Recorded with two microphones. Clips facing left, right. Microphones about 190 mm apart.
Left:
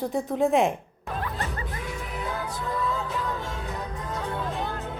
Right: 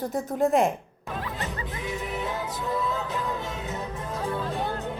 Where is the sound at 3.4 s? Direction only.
20° right (ahead or behind).